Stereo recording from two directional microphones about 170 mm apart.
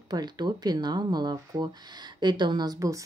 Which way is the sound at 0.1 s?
25° right (ahead or behind).